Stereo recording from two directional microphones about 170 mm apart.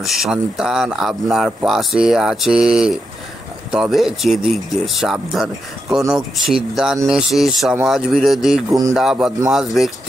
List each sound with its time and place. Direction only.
0.0 s speech: centre (ahead or behind)
8.6 s speech: 20° right (ahead or behind)
8.9 s speech: centre (ahead or behind)